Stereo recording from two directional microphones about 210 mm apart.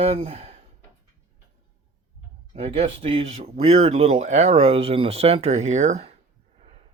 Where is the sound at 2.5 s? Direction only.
30° right (ahead or behind).